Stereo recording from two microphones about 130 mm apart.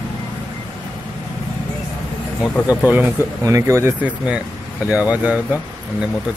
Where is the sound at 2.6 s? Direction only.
10° right (ahead or behind).